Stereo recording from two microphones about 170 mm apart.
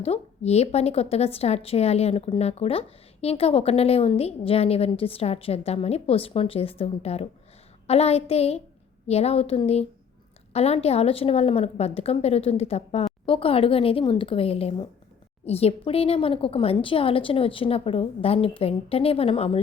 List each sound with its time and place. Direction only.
0.0 s a woman's voice: 35° left (ahead or behind)